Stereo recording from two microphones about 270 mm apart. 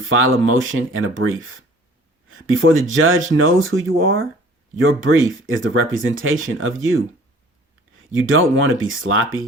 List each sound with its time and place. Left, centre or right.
0.2 s speech: right
8.1 s speech: right